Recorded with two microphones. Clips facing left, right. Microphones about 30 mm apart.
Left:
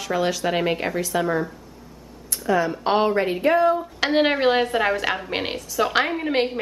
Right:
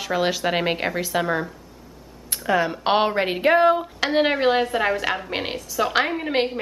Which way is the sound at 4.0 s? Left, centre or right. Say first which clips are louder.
Left 1 dB; centre.